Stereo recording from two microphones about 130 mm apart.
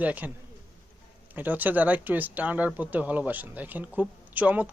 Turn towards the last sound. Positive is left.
turn(degrees=-10)  # may be behind; listen again after turning